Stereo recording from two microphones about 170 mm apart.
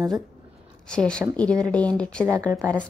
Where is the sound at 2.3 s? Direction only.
20° right (ahead or behind).